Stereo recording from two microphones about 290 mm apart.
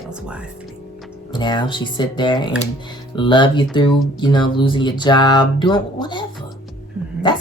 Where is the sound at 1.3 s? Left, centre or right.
Centre.